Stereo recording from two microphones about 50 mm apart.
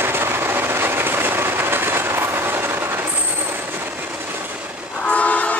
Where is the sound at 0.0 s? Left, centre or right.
Right.